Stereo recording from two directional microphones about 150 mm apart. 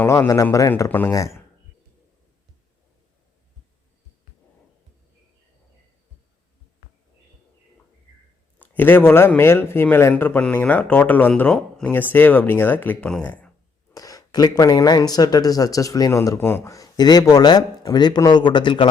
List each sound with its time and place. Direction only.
0.0 s speech: 20° left (ahead or behind)
8.5 s a man's voice: 10° left (ahead or behind)
13.9 s speech: 25° left (ahead or behind)